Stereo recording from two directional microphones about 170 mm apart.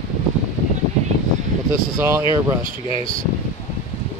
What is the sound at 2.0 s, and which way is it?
Speech, 15° right (ahead or behind).